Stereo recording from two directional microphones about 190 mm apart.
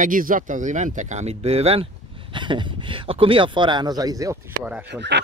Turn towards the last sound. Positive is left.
turn(degrees=-65)  # may be behind; listen again after turning